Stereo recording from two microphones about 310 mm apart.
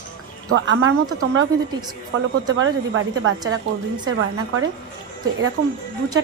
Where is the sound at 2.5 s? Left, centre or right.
Right.